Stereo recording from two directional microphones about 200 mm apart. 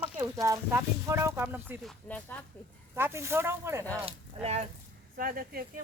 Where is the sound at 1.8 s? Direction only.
5° left (ahead or behind).